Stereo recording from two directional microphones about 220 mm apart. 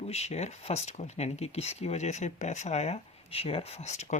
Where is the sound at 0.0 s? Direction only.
30° left (ahead or behind).